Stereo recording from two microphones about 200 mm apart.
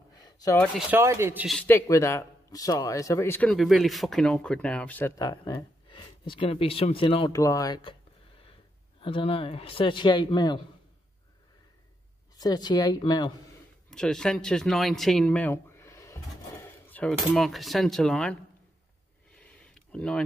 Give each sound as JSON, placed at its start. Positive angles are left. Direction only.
{"t": 0.1, "sound": "a sound", "side_deg": 20}
{"t": 0.6, "sound": "speech", "side_deg": -5}
{"t": 1.6, "sound": "speech", "side_deg": 10}
{"t": 9.0, "sound": "a man's voice", "side_deg": 25}
{"t": 12.4, "sound": "a man's voice", "side_deg": 20}
{"t": 13.8, "sound": "speech", "side_deg": 5}
{"t": 19.3, "sound": "a sound", "side_deg": 5}